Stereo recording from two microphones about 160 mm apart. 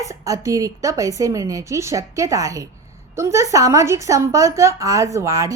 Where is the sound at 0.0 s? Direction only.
20° right (ahead or behind).